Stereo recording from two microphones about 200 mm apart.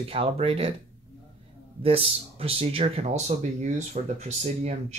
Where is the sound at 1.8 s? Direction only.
30° right (ahead or behind).